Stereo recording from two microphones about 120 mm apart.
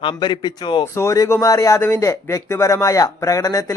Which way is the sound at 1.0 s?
25° left (ahead or behind).